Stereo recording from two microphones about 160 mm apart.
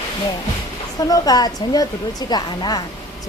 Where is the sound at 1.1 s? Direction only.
25° left (ahead or behind).